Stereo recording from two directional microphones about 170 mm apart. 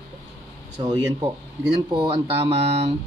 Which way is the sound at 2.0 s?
35° right (ahead or behind).